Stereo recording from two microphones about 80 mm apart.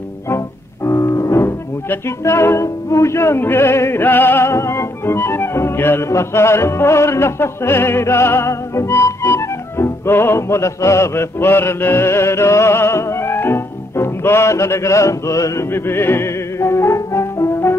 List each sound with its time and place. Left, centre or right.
0.3 s speech: left